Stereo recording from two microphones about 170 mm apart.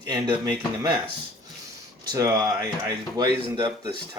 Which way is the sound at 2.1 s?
20° right (ahead or behind).